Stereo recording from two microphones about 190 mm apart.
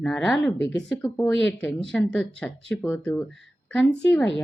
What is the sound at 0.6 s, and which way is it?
Speech, 65° left (ahead or behind).